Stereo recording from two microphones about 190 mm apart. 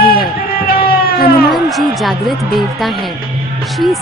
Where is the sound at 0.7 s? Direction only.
50° left (ahead or behind).